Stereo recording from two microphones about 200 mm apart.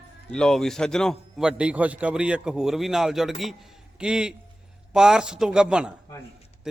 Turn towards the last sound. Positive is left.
turn(degrees=-5)  # may be behind; listen again after turning